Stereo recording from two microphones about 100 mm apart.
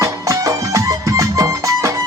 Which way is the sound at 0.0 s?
35° right (ahead or behind).